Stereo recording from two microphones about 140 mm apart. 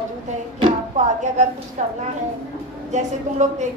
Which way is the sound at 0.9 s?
60° right (ahead or behind).